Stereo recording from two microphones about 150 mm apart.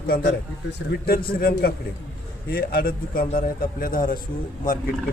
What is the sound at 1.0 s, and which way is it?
A man's voice, 80° left.